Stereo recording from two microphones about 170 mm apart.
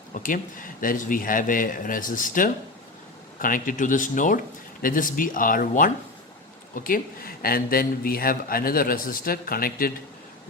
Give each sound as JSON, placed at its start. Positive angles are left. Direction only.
{"t": 0.1, "sound": "a man's voice", "side_deg": 50}